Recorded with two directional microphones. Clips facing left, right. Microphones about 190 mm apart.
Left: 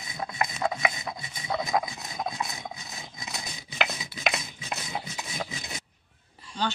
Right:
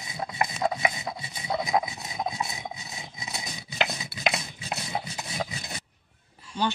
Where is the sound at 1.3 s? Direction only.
15° right (ahead or behind).